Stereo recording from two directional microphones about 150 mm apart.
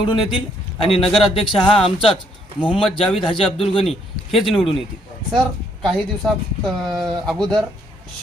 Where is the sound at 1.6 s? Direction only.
35° left (ahead or behind).